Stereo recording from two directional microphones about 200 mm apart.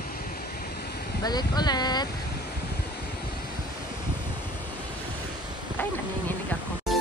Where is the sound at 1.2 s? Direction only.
20° left (ahead or behind).